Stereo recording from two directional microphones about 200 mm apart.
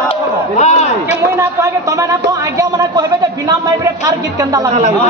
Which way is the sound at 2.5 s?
20° right (ahead or behind).